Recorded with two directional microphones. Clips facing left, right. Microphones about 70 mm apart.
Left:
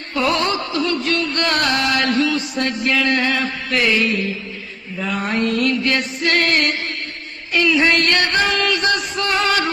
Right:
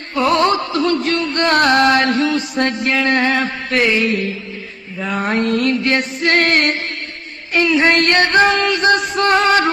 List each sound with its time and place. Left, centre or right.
0.1 s music: right
1.1 s music: right
3.8 s mantra: right
5.0 s music: right